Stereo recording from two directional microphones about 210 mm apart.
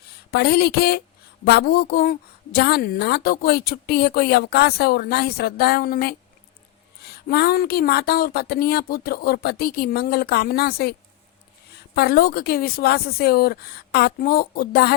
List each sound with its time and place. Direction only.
0.3 s speech: 50° left (ahead or behind)
11.9 s speech: 50° left (ahead or behind)